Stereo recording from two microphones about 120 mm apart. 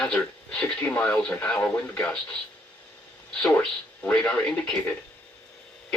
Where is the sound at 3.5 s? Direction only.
15° left (ahead or behind).